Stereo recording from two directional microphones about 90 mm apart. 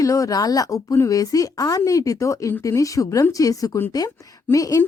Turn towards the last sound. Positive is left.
turn(degrees=40)  # may be behind; listen again after turning